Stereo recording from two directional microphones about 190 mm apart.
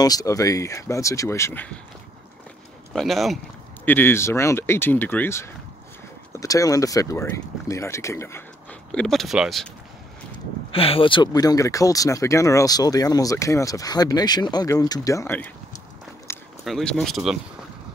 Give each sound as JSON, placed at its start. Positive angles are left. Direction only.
{"t": 0.0, "sound": "speech", "side_deg": 20}
{"t": 2.9, "sound": "speech", "side_deg": 0}
{"t": 3.8, "sound": "speech", "side_deg": 10}
{"t": 8.9, "sound": "speech", "side_deg": 0}
{"t": 10.7, "sound": "speech", "side_deg": 30}
{"t": 16.3, "sound": "a sound", "side_deg": 15}
{"t": 16.6, "sound": "speech", "side_deg": 5}